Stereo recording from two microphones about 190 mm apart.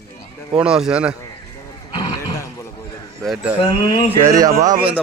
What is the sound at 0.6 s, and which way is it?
Speech, 5° right (ahead or behind).